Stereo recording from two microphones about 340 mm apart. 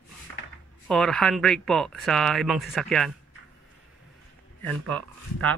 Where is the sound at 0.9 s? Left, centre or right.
Centre.